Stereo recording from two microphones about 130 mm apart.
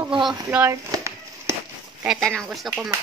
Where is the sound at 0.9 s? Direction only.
20° right (ahead or behind).